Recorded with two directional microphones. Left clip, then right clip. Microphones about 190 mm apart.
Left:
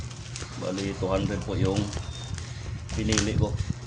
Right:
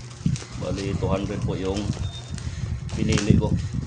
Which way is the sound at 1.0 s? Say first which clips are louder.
Even; 25° right (ahead or behind).